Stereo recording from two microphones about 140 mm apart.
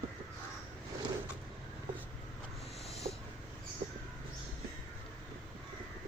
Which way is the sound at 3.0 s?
55° right (ahead or behind).